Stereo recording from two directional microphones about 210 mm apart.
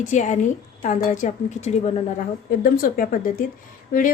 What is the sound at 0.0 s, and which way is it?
A woman's voice, 35° left (ahead or behind).